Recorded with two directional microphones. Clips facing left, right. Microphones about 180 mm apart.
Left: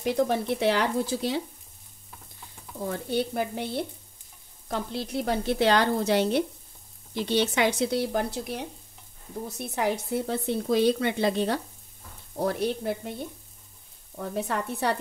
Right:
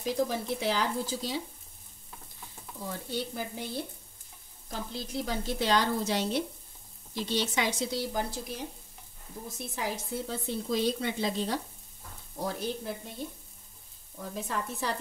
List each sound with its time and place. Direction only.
0.0 s speech: 65° left (ahead or behind)
2.9 s speech: 60° left (ahead or behind)
14.1 s speech: 65° left (ahead or behind)